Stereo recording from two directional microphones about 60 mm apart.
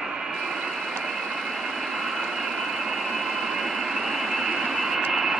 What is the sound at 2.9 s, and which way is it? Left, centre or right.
Vehicle, centre.